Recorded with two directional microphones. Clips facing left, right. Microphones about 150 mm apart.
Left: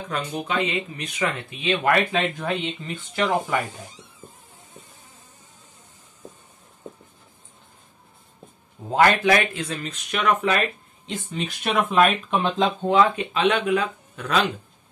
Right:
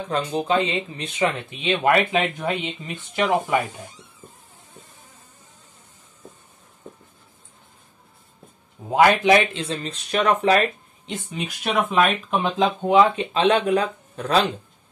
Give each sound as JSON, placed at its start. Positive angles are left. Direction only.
{"t": 0.1, "sound": "speech", "side_deg": -30}
{"t": 8.9, "sound": "speech", "side_deg": -15}
{"t": 11.2, "sound": "speech", "side_deg": -5}
{"t": 12.8, "sound": "speech", "side_deg": -15}
{"t": 13.2, "sound": "speech", "side_deg": -30}